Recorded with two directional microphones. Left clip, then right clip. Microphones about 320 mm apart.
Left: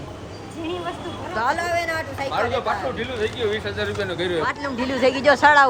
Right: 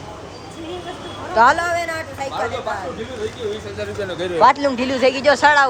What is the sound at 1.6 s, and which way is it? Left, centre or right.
Speech, centre.